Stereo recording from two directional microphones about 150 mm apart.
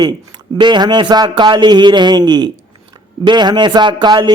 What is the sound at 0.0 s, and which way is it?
A woman's voice, 30° right (ahead or behind).